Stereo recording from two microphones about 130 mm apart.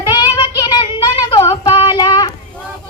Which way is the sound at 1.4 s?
30° left (ahead or behind).